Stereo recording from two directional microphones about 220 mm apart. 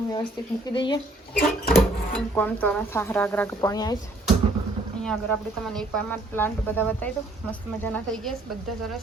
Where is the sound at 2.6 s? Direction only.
10° left (ahead or behind).